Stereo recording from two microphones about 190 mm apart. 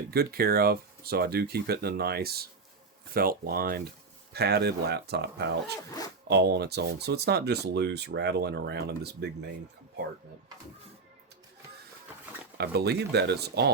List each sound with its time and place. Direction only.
0.1 s speech: 55° right (ahead or behind)
12.5 s speech: 55° right (ahead or behind)